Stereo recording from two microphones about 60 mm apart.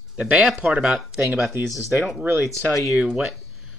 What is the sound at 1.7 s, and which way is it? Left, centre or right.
Speech, centre.